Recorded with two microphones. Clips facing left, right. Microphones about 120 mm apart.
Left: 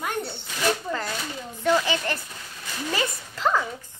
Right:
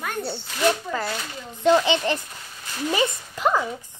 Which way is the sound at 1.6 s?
20° right (ahead or behind).